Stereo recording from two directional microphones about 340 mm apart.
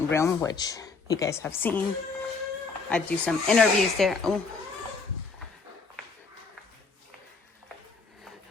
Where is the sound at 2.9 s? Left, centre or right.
Centre.